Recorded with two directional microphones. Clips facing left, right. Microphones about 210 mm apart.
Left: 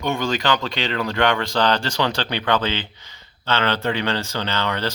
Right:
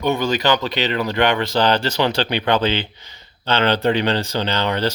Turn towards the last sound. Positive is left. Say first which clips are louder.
# right 4 dB
turn(degrees=-15)  # may be behind; listen again after turning